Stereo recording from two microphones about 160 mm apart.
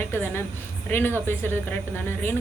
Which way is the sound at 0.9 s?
15° left (ahead or behind).